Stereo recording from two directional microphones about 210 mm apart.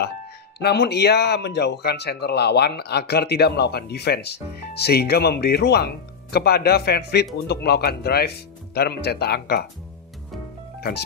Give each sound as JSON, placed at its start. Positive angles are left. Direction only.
{"t": 0.6, "sound": "speech", "side_deg": 50}
{"t": 10.8, "sound": "speech", "side_deg": 50}